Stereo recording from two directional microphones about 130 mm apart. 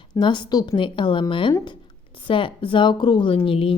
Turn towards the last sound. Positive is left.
turn(degrees=45)  # may be behind; listen again after turning